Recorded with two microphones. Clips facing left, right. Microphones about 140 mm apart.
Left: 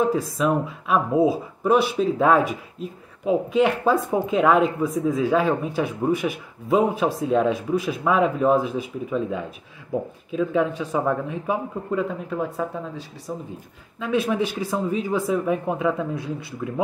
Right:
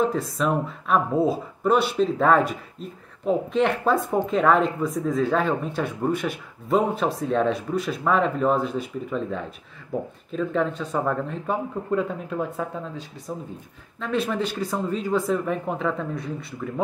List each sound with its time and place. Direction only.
0.1 s speech: 5° left (ahead or behind)